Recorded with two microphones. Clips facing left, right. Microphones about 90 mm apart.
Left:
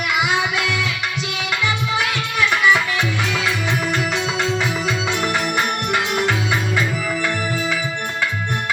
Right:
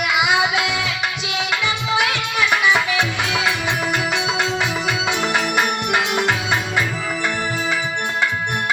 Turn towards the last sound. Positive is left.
turn(degrees=-25)  # may be behind; listen again after turning